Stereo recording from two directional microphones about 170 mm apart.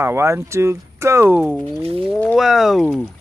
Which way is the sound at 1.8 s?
35° right (ahead or behind).